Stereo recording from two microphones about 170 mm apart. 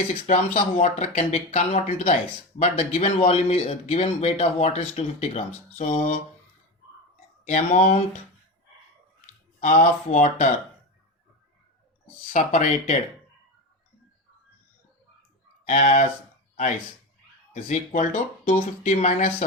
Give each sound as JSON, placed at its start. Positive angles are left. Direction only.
{"t": 0.1, "sound": "a man's voice", "side_deg": 40}
{"t": 7.4, "sound": "a man's voice", "side_deg": 40}
{"t": 9.6, "sound": "speech", "side_deg": 45}
{"t": 12.3, "sound": "speech", "side_deg": 50}
{"t": 15.6, "sound": "speech", "side_deg": 50}
{"t": 17.5, "sound": "speech", "side_deg": 50}